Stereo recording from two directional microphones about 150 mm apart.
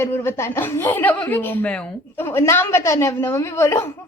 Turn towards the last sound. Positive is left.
turn(degrees=20)  # may be behind; listen again after turning